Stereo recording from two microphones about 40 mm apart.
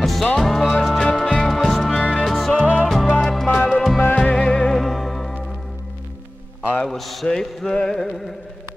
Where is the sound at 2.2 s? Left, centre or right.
Centre.